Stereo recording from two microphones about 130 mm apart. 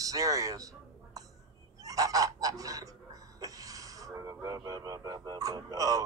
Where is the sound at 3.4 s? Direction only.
25° right (ahead or behind).